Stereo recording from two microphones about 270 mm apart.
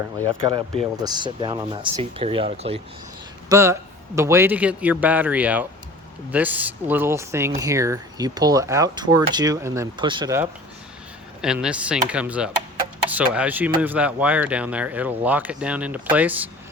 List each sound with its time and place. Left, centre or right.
0.4 s speech: centre
3.5 s speech: centre